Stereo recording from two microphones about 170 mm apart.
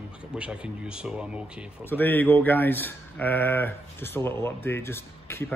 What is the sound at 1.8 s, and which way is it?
Speech, 10° left (ahead or behind).